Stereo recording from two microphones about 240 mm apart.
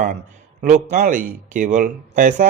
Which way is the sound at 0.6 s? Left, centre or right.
Right.